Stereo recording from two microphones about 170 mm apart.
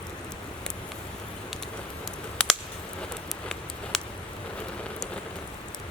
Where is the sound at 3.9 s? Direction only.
Centre (ahead or behind).